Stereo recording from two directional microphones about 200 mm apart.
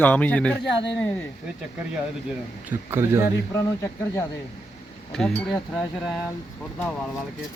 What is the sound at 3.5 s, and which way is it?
Speech, 15° left (ahead or behind).